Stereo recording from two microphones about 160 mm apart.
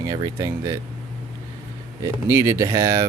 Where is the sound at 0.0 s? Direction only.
20° right (ahead or behind).